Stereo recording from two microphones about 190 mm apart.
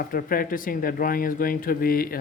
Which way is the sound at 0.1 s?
50° left (ahead or behind).